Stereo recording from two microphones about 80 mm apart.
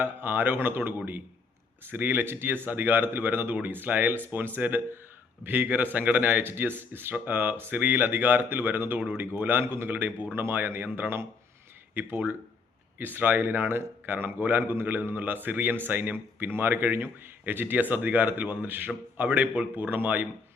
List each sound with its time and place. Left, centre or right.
0.0 s speech: right